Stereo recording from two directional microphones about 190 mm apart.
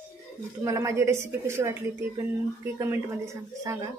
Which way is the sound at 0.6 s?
15° right (ahead or behind).